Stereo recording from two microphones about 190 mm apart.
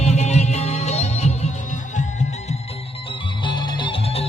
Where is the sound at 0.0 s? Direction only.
35° left (ahead or behind).